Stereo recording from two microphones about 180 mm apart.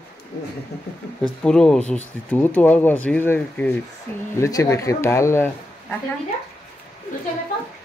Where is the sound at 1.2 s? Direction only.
5° left (ahead or behind).